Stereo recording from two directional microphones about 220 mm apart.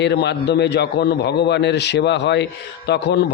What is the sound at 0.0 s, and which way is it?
A man's voice, 50° left (ahead or behind).